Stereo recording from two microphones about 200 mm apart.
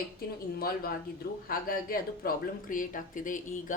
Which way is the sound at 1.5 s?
45° left (ahead or behind).